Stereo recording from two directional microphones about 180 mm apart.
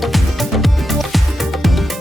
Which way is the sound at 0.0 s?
Centre (ahead or behind).